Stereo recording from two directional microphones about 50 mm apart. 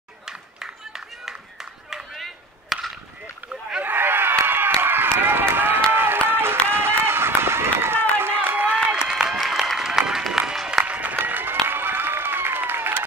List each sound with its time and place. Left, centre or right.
0.2 s a sound: centre
2.7 s chop: centre
3.8 s run: right
6.2 s music: right
6.7 s run: right
8.2 s run: right
8.7 s applause: centre
10.3 s music: centre
10.9 s applause: right